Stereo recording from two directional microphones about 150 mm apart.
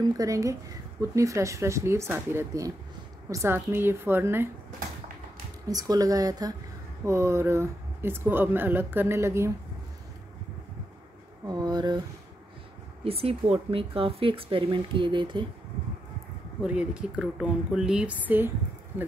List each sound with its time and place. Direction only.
0.2 s a woman's voice: 20° right (ahead or behind)
5.7 s a woman's voice: 25° right (ahead or behind)
11.4 s a woman's voice: 25° right (ahead or behind)
13.0 s speech: 40° right (ahead or behind)
16.6 s speech: 5° right (ahead or behind)